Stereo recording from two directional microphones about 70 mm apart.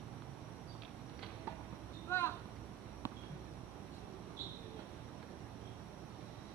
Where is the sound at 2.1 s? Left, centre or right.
Left.